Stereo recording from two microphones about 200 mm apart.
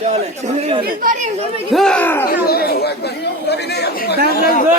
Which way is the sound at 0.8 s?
40° right (ahead or behind).